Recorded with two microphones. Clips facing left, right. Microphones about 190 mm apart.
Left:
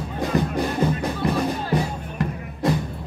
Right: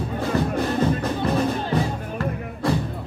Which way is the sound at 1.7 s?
20° left (ahead or behind).